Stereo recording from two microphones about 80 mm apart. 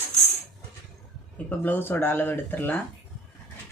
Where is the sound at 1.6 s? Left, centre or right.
Left.